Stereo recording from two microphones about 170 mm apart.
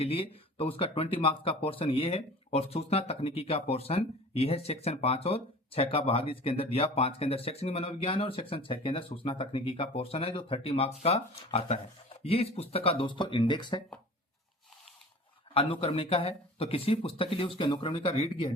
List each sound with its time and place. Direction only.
0.0 s speech: 35° left (ahead or behind)
15.5 s speech: 35° left (ahead or behind)